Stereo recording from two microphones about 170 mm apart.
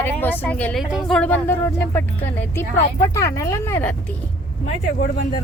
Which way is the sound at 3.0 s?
15° left (ahead or behind).